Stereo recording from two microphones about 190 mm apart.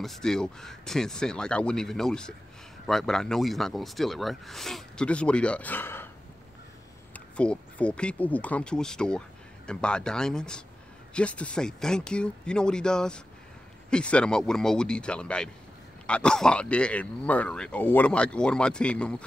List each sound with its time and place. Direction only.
0.0 s speech: centre (ahead or behind)
7.3 s speech: 5° left (ahead or behind)